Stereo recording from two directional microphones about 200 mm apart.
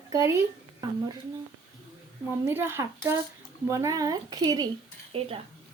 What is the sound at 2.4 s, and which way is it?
Speech, 10° right (ahead or behind).